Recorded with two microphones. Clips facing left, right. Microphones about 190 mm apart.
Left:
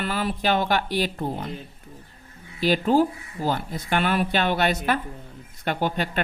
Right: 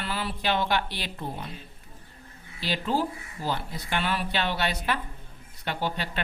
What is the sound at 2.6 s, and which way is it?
Speech, 50° left (ahead or behind).